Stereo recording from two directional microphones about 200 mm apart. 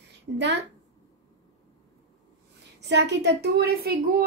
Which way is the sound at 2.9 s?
60° right (ahead or behind).